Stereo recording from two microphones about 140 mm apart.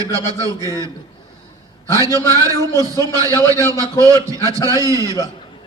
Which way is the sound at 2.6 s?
25° left (ahead or behind).